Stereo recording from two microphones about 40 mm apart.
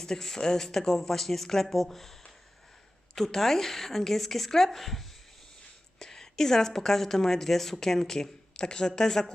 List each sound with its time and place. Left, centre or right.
0.0 s a woman's voice: centre
3.2 s a woman's voice: centre